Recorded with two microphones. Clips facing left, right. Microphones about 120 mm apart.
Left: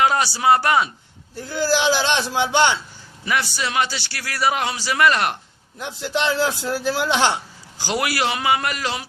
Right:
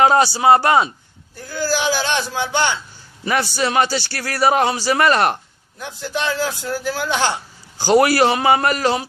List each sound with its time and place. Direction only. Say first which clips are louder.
0.0 s a man's voice: right 5 dB; 30° right (ahead or behind)
1.5 s speech: left 1 dB; 20° left (ahead or behind)
3.2 s a man's voice: right 4 dB; 40° right (ahead or behind)
5.8 s speech: left 1 dB; 20° left (ahead or behind)
7.8 s a man's voice: right 9 dB; 40° right (ahead or behind)